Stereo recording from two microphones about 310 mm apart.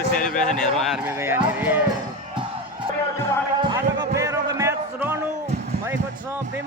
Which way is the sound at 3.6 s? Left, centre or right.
Centre.